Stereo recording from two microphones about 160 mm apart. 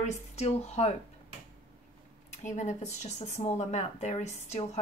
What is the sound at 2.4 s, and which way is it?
Speech, 50° left (ahead or behind).